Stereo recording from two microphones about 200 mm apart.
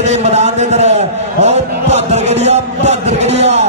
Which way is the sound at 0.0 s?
35° right (ahead or behind).